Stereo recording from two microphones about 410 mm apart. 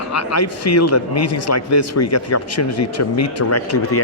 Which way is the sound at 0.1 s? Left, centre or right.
Left.